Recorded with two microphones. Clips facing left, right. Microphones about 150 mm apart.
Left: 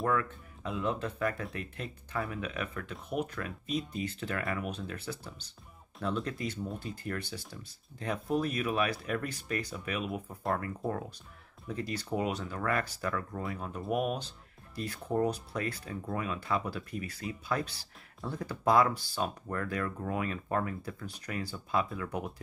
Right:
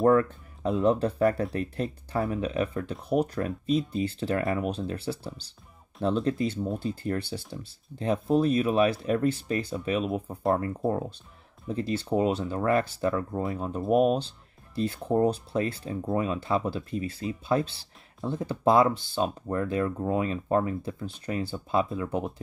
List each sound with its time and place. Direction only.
0.0 s speech: 35° right (ahead or behind)